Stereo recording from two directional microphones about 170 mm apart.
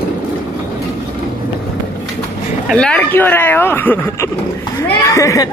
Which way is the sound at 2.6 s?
5° left (ahead or behind).